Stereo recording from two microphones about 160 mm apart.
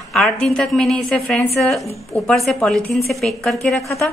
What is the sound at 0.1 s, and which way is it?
A woman's voice, 5° left (ahead or behind).